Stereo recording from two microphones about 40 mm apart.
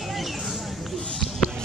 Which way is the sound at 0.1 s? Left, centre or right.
Centre.